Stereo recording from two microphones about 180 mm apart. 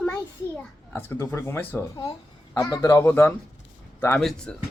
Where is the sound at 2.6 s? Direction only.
20° left (ahead or behind); by 4.5 s 5° left (ahead or behind).